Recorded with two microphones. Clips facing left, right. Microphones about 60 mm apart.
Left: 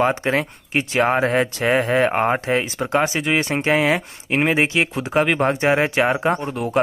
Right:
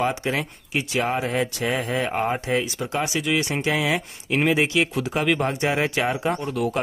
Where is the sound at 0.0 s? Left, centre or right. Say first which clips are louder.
Left 5 dB; left.